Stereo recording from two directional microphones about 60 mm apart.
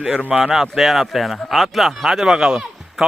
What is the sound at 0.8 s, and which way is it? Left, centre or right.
Speech, centre.